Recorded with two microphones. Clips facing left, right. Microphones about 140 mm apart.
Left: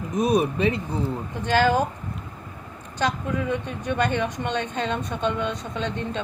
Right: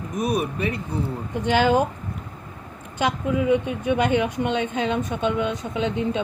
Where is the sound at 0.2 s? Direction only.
30° left (ahead or behind).